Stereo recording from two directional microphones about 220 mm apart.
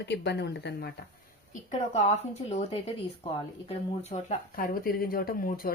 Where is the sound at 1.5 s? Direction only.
30° left (ahead or behind).